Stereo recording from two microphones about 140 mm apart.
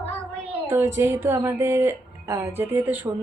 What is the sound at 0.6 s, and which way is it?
A woman's voice, 15° right (ahead or behind).